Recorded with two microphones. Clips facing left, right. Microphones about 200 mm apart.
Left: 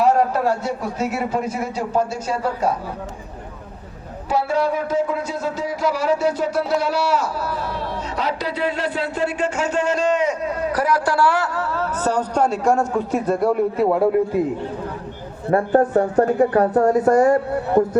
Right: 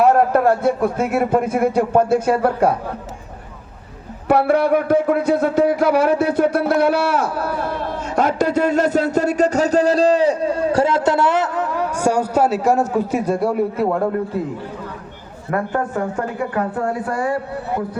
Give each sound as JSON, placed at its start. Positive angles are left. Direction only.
{"t": 0.0, "sound": "a man's voice", "side_deg": -55}
{"t": 4.3, "sound": "speech", "side_deg": -60}
{"t": 15.4, "sound": "a man's voice", "side_deg": 35}